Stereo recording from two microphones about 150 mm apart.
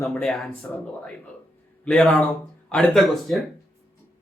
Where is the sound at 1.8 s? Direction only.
5° left (ahead or behind).